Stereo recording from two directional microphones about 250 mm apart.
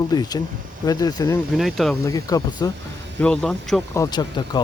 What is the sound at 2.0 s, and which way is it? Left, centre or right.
Speech, centre.